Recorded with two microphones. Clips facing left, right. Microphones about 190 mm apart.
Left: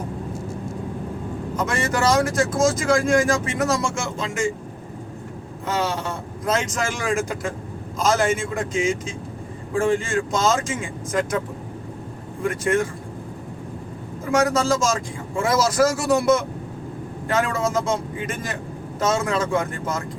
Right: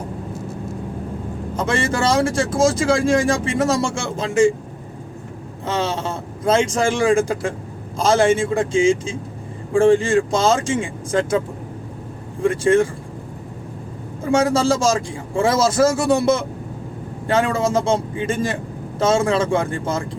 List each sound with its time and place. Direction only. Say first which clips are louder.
1.5 s speech: right 3 dB; 30° right (ahead or behind)
5.6 s speech: right 2 dB; 25° right (ahead or behind)
14.3 s speech: right 3 dB; 30° right (ahead or behind)